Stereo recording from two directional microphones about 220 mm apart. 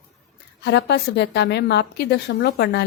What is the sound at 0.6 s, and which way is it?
A woman's voice, 50° left (ahead or behind).